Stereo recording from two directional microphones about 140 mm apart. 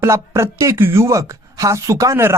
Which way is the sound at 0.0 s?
20° right (ahead or behind).